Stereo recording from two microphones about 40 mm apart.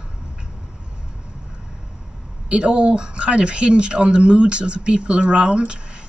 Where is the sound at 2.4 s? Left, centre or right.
Right.